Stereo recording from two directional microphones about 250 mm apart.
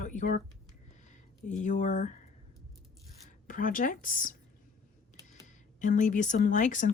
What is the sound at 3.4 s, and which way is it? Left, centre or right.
Speech, left.